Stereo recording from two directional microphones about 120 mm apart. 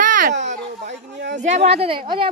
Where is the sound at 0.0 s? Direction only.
85° right.